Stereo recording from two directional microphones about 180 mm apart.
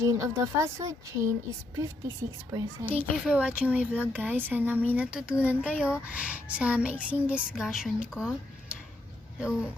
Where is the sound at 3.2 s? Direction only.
5° right (ahead or behind).